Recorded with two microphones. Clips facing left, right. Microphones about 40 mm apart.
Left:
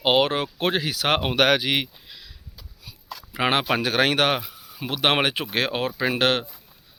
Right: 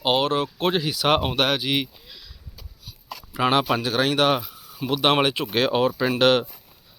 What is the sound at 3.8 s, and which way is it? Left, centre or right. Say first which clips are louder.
Speech: even; left.